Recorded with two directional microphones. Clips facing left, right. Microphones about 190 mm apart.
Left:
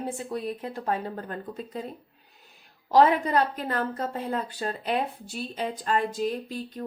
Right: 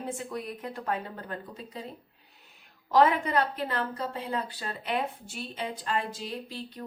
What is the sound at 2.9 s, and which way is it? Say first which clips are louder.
A woman's voice: left 3 dB; 35° left (ahead or behind).